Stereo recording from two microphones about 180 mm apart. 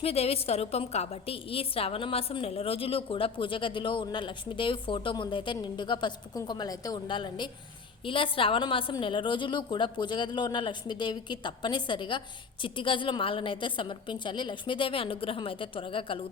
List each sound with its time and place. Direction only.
0.0 s a woman's voice: 35° left (ahead or behind)